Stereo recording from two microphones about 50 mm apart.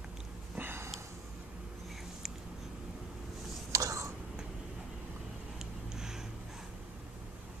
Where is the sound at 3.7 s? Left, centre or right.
Right.